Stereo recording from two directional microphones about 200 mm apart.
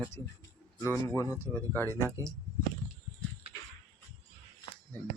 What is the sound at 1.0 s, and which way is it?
Speech, 15° left (ahead or behind).